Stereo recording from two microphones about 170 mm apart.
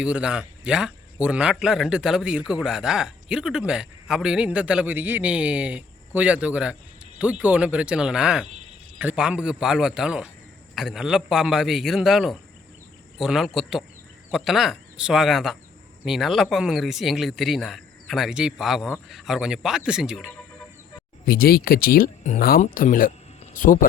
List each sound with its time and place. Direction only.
0.0 s a man's voice: 5° right (ahead or behind)
21.2 s speech: 60° left (ahead or behind)
23.4 s a sound: 50° left (ahead or behind)